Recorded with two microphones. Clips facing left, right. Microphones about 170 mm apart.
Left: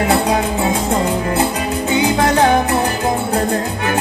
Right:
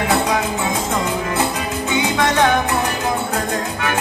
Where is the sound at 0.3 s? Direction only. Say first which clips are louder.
Left 3 dB; 35° left (ahead or behind).